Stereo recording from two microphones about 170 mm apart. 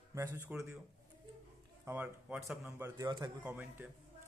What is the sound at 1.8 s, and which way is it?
Speech, 10° right (ahead or behind).